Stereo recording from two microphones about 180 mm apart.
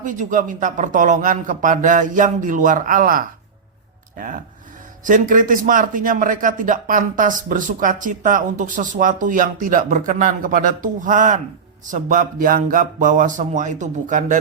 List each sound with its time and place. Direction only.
0.0 s a man's voice: 45° right (ahead or behind)